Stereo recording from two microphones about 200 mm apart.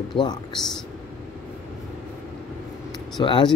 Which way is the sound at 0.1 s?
20° left (ahead or behind).